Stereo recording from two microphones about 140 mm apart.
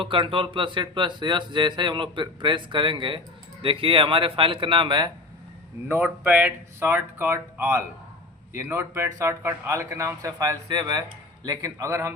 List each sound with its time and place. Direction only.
0.0 s speech: 40° right (ahead or behind)
5.9 s speech: 10° right (ahead or behind)